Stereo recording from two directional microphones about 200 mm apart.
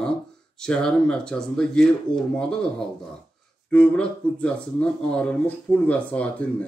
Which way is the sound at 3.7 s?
5° left (ahead or behind).